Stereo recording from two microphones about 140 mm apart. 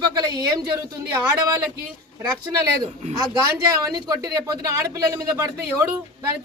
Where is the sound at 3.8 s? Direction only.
25° right (ahead or behind).